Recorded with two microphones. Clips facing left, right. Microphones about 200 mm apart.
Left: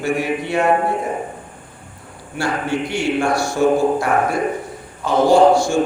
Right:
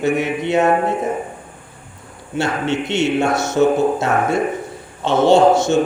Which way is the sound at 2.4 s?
25° right (ahead or behind).